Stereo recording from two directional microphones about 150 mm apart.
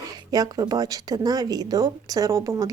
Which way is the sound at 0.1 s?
25° right (ahead or behind).